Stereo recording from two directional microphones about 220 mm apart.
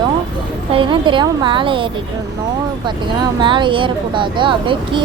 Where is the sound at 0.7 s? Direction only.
25° right (ahead or behind).